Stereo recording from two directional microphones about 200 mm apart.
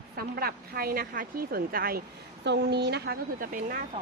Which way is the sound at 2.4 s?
60° right (ahead or behind).